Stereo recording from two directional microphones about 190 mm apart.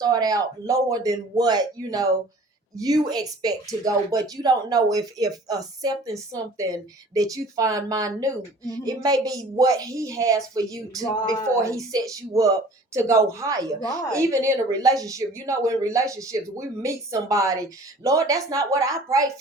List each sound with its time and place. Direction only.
0.0 s speech: 20° right (ahead or behind)
11.1 s speech: 20° left (ahead or behind)
11.4 s a woman's voice: 15° right (ahead or behind)